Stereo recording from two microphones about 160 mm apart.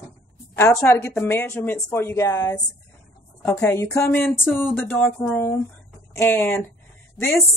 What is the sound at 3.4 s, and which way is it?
Speech, 10° left (ahead or behind).